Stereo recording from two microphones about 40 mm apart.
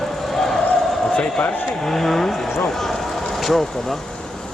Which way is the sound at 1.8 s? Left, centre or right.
Centre.